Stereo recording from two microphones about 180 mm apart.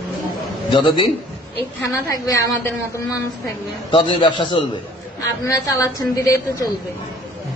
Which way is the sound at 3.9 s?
25° left (ahead or behind).